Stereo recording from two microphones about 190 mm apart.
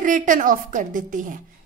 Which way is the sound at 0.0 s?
45° right (ahead or behind).